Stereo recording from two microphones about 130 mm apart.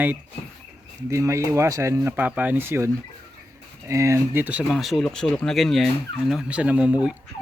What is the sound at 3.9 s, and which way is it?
Speech, 25° right (ahead or behind).